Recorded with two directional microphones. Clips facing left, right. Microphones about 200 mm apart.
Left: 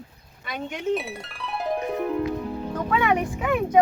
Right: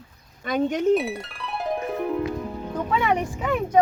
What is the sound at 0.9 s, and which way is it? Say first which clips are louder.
Music: right 5 dB; centre (ahead or behind).